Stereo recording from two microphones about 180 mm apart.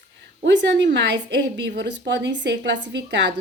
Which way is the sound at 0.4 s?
80° right.